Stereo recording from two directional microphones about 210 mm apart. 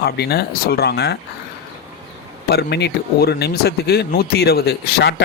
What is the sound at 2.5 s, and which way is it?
Speech, 50° left (ahead or behind).